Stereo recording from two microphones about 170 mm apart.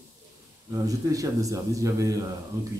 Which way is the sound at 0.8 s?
20° right (ahead or behind).